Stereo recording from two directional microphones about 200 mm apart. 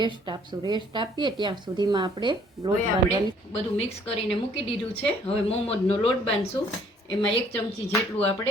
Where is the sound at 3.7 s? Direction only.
30° left (ahead or behind).